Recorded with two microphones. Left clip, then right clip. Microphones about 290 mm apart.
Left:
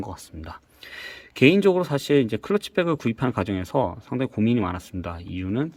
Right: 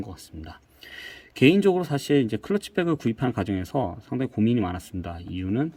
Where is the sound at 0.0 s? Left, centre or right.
Centre.